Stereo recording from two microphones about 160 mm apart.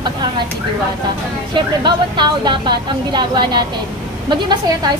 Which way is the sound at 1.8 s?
30° right (ahead or behind).